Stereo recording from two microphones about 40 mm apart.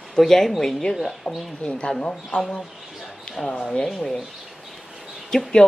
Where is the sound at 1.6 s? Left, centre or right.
Left.